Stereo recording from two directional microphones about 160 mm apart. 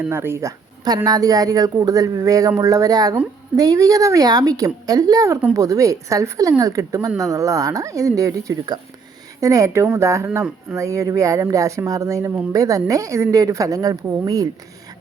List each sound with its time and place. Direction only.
0.0 s speech: 15° right (ahead or behind)